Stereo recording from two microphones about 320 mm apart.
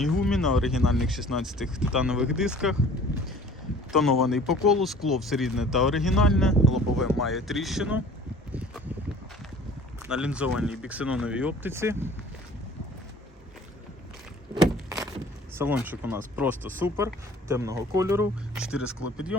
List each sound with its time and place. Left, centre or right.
0.0 s speech: centre
3.9 s speech: centre
10.1 s speech: centre
14.5 s a sound: centre
15.5 s speech: centre